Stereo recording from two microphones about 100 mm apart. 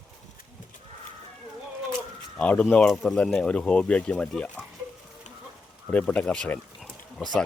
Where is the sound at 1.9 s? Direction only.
15° left (ahead or behind).